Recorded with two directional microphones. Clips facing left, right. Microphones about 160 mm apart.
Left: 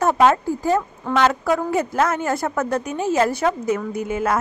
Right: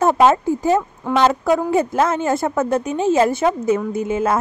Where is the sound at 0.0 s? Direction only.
25° right (ahead or behind).